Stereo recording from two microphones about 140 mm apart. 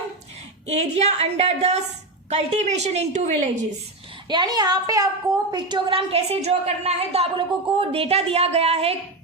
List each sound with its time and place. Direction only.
0.7 s a woman's voice: 50° right (ahead or behind)
4.3 s a woman's voice: 30° right (ahead or behind); by 9.0 s 45° right (ahead or behind)